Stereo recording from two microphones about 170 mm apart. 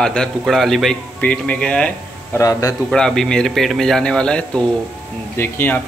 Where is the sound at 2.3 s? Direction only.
20° left (ahead or behind).